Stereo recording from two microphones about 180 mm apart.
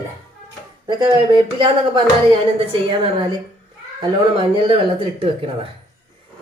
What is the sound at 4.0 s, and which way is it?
Speech, 30° right (ahead or behind).